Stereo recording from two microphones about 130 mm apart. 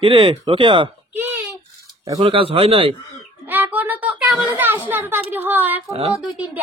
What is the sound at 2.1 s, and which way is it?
Speech, 45° right (ahead or behind).